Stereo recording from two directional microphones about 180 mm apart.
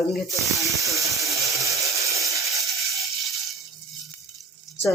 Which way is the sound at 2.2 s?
Centre (ahead or behind).